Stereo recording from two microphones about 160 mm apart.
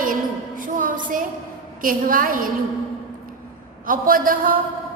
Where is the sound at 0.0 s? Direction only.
60° right (ahead or behind).